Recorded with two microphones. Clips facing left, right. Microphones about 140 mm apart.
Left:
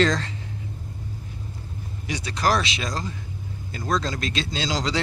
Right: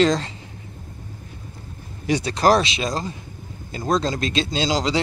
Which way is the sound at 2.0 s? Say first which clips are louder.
Right 7 dB; 30° right (ahead or behind).